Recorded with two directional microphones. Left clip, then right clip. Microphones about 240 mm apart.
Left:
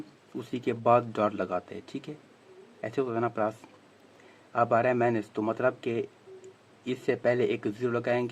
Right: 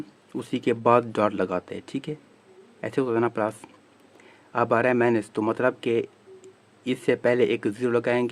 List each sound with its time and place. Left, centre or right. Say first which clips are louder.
0.3 s speech: right 6 dB; right